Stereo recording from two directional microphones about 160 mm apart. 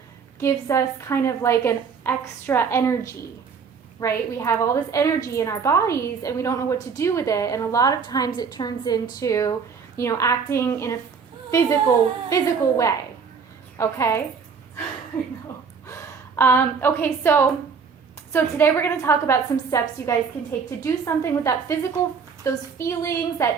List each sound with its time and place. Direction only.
0.3 s a woman's voice: 20° left (ahead or behind)
12.3 s a woman's voice: 20° left (ahead or behind)
15.9 s a woman's voice: 15° left (ahead or behind)